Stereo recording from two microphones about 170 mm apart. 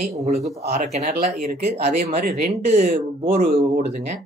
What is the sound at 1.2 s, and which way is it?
Speech, 65° right (ahead or behind).